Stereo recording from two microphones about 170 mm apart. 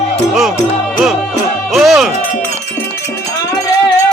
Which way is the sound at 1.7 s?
Centre (ahead or behind).